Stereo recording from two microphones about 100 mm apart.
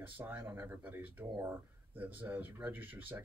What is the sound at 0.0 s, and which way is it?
Speech, 20° right (ahead or behind).